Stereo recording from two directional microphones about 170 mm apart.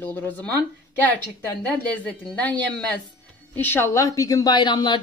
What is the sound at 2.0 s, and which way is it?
A woman's voice, 10° left (ahead or behind).